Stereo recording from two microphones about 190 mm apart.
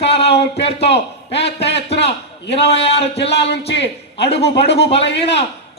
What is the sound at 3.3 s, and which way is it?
Speech, 60° left (ahead or behind).